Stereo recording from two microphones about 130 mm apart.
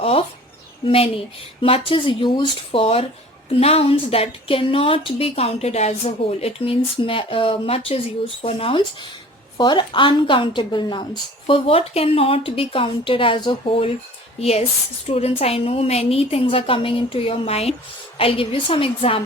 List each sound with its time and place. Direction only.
0.0 s a woman's voice: 50° left (ahead or behind)
15.0 s speech: 50° left (ahead or behind)